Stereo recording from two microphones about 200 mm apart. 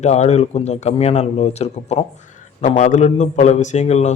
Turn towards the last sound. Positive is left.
turn(degrees=35)  # may be behind; listen again after turning